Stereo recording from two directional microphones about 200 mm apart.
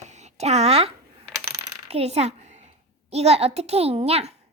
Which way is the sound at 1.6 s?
30° right (ahead or behind).